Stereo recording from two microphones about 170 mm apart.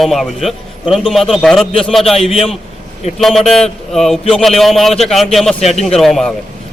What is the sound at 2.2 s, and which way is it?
Speech, 35° left (ahead or behind).